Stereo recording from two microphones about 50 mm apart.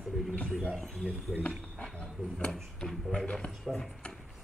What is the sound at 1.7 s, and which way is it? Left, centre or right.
Speech, centre.